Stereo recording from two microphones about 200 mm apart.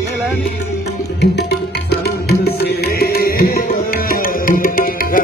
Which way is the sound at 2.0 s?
50° left (ahead or behind).